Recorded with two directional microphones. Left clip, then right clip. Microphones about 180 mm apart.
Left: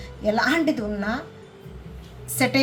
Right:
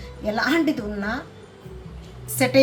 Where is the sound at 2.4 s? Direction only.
15° left (ahead or behind).